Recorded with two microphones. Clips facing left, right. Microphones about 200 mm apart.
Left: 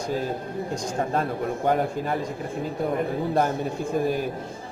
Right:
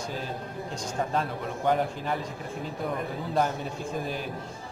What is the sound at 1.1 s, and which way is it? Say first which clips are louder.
Speech: left 5 dB; 50° left (ahead or behind).